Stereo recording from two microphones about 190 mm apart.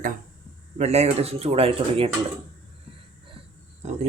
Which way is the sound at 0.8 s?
35° right (ahead or behind).